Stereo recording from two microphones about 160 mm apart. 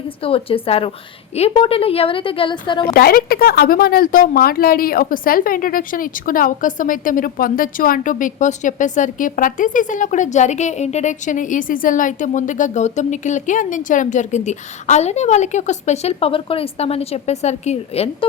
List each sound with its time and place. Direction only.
0.2 s a woman's voice: 35° left (ahead or behind)
2.9 s speech: 70° left (ahead or behind); by 18.3 s 40° left (ahead or behind)